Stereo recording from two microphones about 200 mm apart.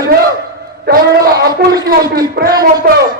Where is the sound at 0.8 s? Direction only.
55° right (ahead or behind).